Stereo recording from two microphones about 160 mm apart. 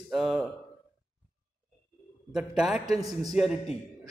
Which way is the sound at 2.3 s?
5° right (ahead or behind).